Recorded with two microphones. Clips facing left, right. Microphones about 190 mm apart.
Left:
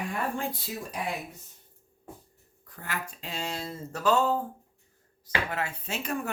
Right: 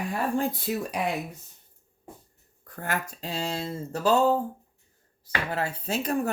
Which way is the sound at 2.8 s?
45° right (ahead or behind).